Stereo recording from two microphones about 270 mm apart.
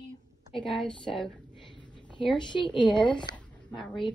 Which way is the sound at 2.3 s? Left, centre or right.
Centre.